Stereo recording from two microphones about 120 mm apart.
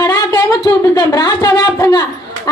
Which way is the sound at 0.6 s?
35° left (ahead or behind).